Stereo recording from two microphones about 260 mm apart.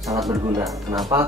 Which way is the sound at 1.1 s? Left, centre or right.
Centre.